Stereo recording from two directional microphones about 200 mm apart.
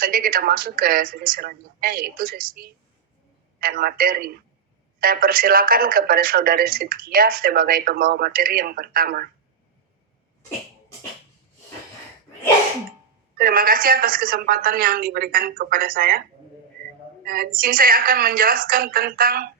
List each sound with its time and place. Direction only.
0.0 s speech: 45° right (ahead or behind)
13.3 s speech: 45° right (ahead or behind)
17.2 s speech: 50° right (ahead or behind)